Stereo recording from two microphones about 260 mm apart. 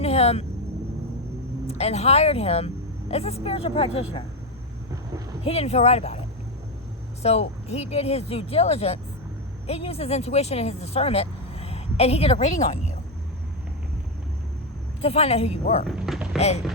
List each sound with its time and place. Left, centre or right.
0.0 s vehicle: left
1.6 s speech: left
5.5 s speech: left
7.2 s speech: left
15.0 s speech: left
15.9 s speech: centre